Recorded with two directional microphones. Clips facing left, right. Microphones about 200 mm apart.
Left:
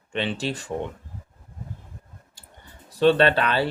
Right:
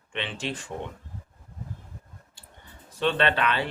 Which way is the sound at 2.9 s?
40° left (ahead or behind).